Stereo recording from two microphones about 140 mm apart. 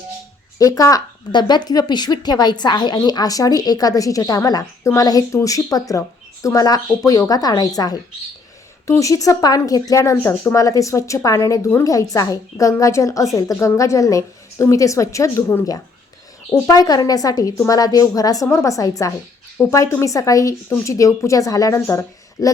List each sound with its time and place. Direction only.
0.6 s speech: 25° left (ahead or behind)